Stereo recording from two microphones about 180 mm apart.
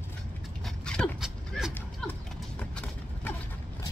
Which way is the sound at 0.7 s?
5° left (ahead or behind).